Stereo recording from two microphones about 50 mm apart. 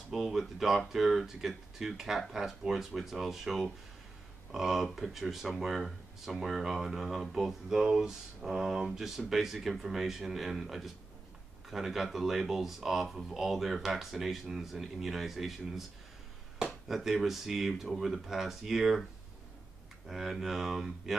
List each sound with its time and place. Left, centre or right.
0.1 s speech: centre
16.8 s speech: centre
20.1 s speech: centre